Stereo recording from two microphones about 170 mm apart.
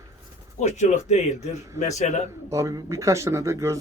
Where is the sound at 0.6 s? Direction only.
40° left (ahead or behind).